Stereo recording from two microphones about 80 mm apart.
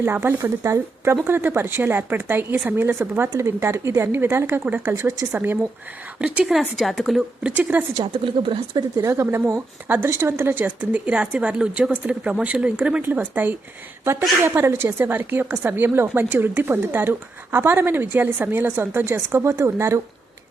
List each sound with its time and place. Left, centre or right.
0.0 s a woman's voice: right
0.6 s a woman's voice: right
6.1 s speech: centre
6.5 s a woman's voice: centre
7.4 s speech: centre
7.9 s speech: right
9.0 s speech: right; by 13.0 s centre
13.0 s a woman's voice: right